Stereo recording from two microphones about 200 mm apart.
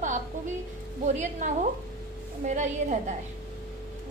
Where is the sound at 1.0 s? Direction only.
35° right (ahead or behind).